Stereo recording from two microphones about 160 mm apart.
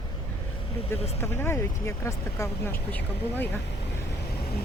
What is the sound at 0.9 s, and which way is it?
Speech, 15° left (ahead or behind).